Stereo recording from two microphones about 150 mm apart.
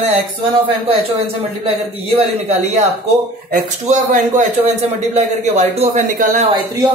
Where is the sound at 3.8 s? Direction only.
55° right (ahead or behind).